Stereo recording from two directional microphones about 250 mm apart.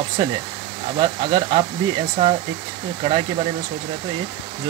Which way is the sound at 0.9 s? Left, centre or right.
Centre.